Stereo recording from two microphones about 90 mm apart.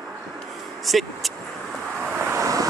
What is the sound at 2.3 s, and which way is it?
Vehicle, 40° right (ahead or behind).